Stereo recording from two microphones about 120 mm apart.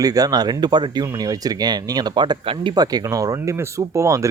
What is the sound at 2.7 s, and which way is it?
Speech, 30° right (ahead or behind).